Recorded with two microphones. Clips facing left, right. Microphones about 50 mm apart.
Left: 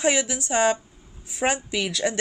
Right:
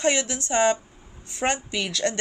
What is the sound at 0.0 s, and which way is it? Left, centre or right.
A woman's voice, centre.